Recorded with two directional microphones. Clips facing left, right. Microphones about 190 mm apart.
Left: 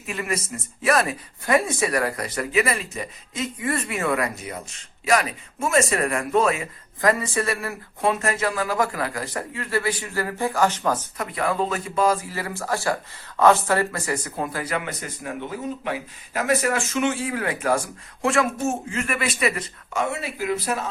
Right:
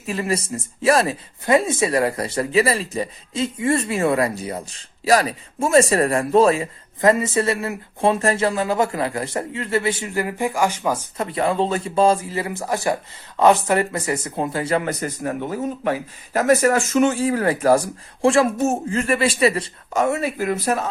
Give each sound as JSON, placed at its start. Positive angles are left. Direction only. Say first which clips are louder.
{"t": 0.0, "sound": "speech", "louder": "right 5 dB", "side_deg": -30}
{"t": 11.2, "sound": "speech", "louder": "right 7 dB", "side_deg": -25}
{"t": 14.8, "sound": "speech", "louder": "right 7 dB", "side_deg": -40}